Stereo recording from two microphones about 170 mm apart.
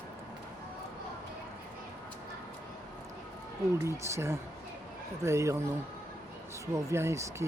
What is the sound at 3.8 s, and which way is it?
Speech, 15° right (ahead or behind).